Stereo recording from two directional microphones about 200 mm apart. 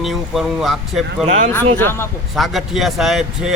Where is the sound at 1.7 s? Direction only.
10° left (ahead or behind).